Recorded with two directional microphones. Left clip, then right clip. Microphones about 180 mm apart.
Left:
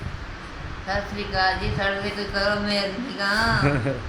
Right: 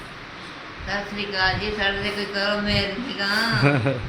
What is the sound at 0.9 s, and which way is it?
A woman's voice, centre (ahead or behind).